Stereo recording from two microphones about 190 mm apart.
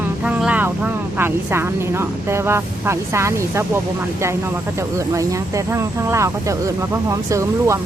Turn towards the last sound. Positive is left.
turn(degrees=-15)  # may be behind; listen again after turning